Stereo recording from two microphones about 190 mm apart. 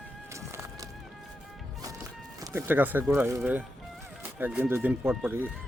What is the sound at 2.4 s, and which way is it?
Speech, 10° right (ahead or behind).